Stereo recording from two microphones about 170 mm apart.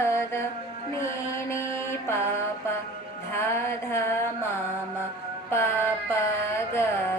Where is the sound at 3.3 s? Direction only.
15° left (ahead or behind).